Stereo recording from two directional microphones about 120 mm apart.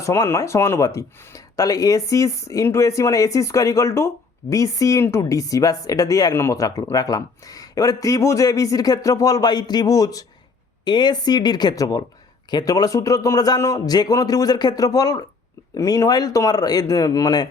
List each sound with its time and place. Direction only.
0.0 s a man's voice: 25° left (ahead or behind)